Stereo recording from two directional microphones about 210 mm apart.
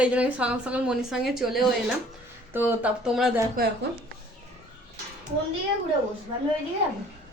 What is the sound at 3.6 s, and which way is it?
Speech, 40° right (ahead or behind).